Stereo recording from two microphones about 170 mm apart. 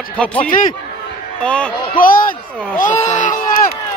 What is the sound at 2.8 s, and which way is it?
Speech, 45° left (ahead or behind).